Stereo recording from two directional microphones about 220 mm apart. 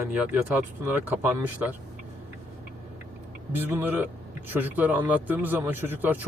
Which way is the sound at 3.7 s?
10° right (ahead or behind).